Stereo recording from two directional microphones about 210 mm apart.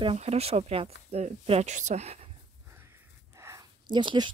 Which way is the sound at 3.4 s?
20° right (ahead or behind).